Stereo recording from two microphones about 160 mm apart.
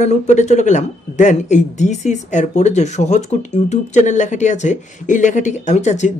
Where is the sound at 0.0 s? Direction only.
45° left (ahead or behind).